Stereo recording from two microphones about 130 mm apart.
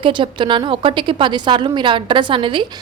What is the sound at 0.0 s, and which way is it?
A woman's voice, 40° right (ahead or behind).